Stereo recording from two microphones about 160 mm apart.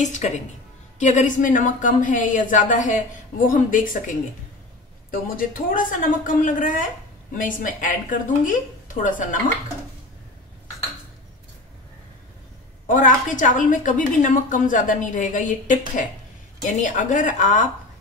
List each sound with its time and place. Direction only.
0.0 s a woman's voice: 50° left (ahead or behind)
5.1 s a woman's voice: 65° left (ahead or behind)
12.8 s a woman's voice: 55° left (ahead or behind)